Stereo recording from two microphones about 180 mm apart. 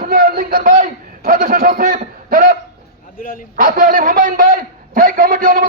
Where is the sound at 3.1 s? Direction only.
50° left (ahead or behind).